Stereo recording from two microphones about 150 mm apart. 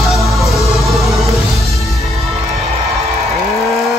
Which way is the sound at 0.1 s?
Centre (ahead or behind).